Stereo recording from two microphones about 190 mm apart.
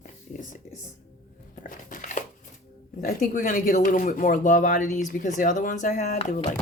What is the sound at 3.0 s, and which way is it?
Speech, 45° left (ahead or behind).